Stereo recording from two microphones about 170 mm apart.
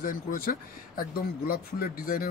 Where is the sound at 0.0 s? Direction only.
55° left (ahead or behind).